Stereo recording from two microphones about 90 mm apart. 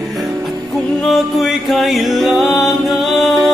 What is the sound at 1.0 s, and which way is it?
Music, centre (ahead or behind).